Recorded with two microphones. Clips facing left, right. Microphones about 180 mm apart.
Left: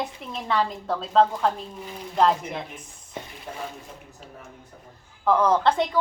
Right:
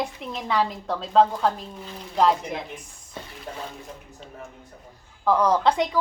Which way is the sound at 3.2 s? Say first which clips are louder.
Left 2 dB; 15° left (ahead or behind).